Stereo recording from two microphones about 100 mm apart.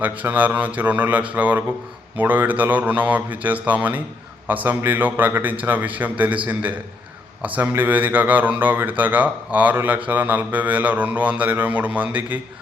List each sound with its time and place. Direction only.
0.0 s speech: 15° right (ahead or behind)